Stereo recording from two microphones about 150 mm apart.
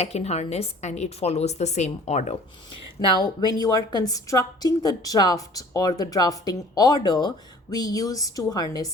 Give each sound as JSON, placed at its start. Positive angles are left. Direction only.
{"t": 0.0, "sound": "a woman's voice", "side_deg": 45}
{"t": 3.0, "sound": "a woman's voice", "side_deg": 30}